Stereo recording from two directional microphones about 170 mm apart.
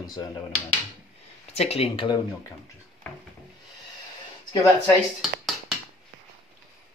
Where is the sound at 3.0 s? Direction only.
10° left (ahead or behind).